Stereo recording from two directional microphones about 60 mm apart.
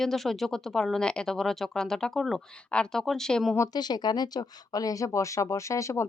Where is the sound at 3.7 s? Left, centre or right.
Left.